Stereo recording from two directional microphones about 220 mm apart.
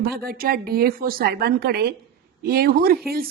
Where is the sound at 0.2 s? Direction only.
40° right (ahead or behind).